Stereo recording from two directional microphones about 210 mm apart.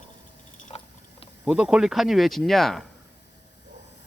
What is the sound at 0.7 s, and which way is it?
Pig, 30° left (ahead or behind).